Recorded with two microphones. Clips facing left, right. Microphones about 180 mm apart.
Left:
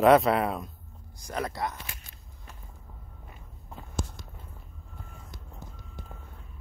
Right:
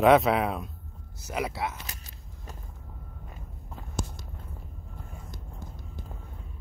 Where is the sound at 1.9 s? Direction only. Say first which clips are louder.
Right 1 dB; 40° right (ahead or behind).